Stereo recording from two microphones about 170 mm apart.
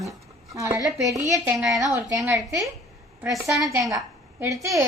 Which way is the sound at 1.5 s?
Centre (ahead or behind).